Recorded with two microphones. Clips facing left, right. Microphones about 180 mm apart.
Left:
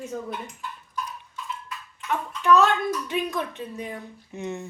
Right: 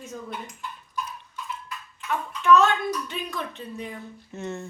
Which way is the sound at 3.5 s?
15° left (ahead or behind).